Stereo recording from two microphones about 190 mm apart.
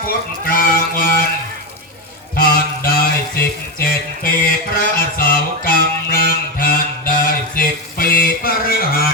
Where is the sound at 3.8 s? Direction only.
50° left (ahead or behind).